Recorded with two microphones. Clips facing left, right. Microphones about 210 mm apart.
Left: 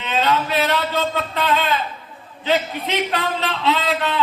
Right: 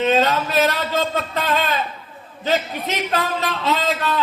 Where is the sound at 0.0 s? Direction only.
40° right (ahead or behind).